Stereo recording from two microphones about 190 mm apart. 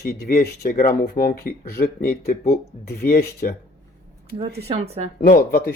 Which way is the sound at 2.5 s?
55° left (ahead or behind).